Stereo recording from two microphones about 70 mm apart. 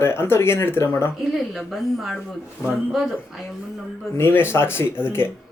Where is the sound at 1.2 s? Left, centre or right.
Centre.